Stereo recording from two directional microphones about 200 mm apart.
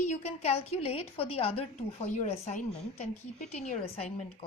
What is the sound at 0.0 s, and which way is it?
A woman's voice, 35° left (ahead or behind).